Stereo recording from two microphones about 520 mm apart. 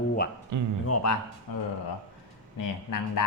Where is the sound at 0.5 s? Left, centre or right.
Right.